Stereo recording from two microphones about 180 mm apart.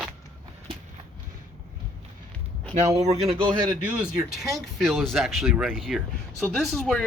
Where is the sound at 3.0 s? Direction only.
35° right (ahead or behind).